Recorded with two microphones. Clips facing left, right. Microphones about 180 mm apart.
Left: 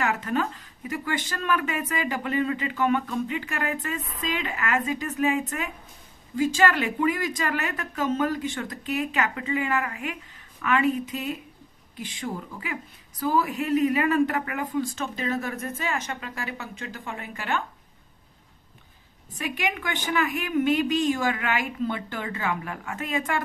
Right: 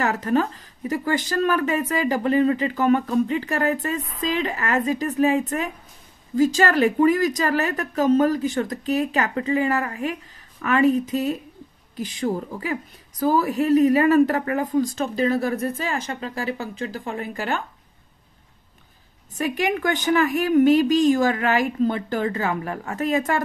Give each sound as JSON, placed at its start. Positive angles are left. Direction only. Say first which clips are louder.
{"t": 0.0, "sound": "speech", "louder": "right 5 dB", "side_deg": -40}
{"t": 19.3, "sound": "speech", "louder": "right 7 dB", "side_deg": -40}